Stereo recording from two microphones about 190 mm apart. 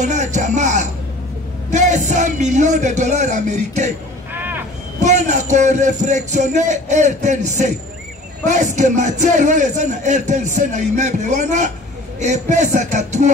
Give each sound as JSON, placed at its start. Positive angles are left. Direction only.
{"t": 0.0, "sound": "speech", "side_deg": -40}
{"t": 4.3, "sound": "a sound", "side_deg": -10}
{"t": 5.0, "sound": "speech", "side_deg": -40}